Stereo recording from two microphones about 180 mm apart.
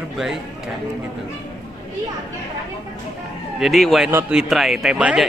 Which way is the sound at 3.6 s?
Centre (ahead or behind).